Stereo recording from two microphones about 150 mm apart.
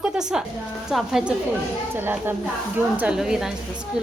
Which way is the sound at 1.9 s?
15° right (ahead or behind).